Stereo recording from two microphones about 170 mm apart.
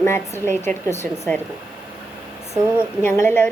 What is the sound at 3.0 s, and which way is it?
Speech, 15° left (ahead or behind).